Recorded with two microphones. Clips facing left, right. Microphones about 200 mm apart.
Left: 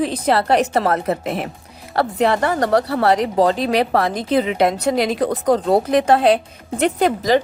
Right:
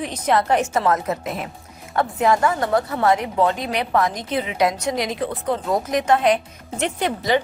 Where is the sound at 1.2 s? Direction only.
65° left (ahead or behind).